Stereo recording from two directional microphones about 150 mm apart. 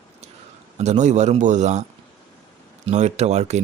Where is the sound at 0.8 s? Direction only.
50° right (ahead or behind).